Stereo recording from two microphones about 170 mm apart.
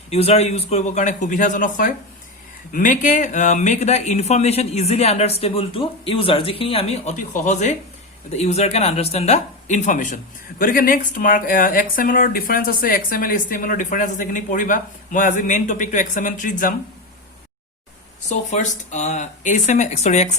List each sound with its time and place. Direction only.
0.1 s speech: 35° left (ahead or behind)
18.3 s speech: 45° left (ahead or behind)